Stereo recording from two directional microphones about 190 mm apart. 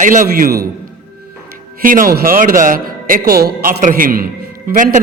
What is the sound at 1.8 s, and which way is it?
A man's voice, 45° right (ahead or behind).